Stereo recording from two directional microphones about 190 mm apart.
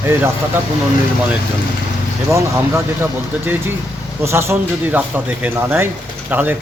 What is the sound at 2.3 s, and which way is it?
Speech, 15° right (ahead or behind).